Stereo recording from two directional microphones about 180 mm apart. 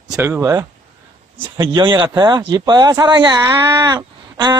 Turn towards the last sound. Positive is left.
turn(degrees=-25)  # may be behind; listen again after turning